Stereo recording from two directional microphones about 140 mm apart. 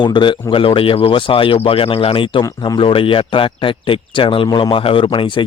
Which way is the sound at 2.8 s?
40° left (ahead or behind).